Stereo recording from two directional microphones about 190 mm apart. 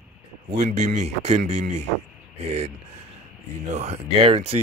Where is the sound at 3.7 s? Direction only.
35° right (ahead or behind).